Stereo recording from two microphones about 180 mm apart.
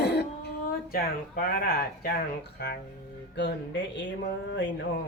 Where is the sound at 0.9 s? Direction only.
55° left (ahead or behind).